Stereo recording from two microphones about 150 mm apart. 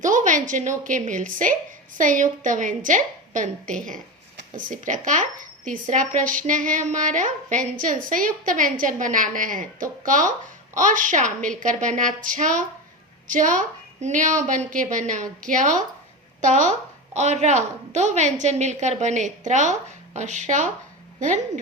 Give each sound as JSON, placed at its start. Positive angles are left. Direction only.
{"t": 0.0, "sound": "a woman's voice", "side_deg": -55}